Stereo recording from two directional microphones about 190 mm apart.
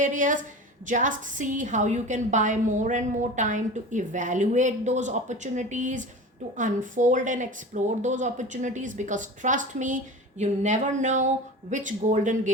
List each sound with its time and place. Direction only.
0.0 s a woman's voice: 45° right (ahead or behind)